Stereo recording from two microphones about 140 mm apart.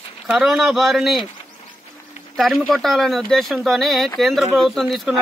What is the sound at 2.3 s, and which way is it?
A man's voice, centre (ahead or behind).